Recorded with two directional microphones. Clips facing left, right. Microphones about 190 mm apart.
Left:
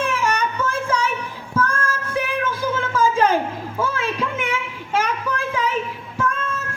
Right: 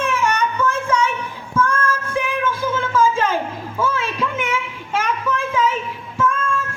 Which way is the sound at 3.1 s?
40° left (ahead or behind).